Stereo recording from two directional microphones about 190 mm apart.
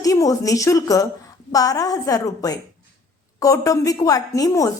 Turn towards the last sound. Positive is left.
turn(degrees=15)  # may be behind; listen again after turning